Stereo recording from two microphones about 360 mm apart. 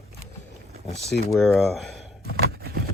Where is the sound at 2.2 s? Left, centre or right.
Right.